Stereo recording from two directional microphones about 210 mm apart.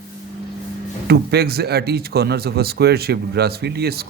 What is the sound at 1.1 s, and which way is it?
Speech, 50° right (ahead or behind).